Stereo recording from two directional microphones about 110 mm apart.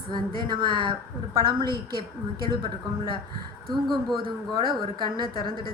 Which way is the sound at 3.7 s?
Centre (ahead or behind).